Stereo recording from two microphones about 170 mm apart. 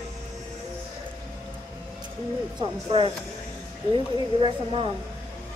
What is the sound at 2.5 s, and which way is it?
Speech, 30° right (ahead or behind).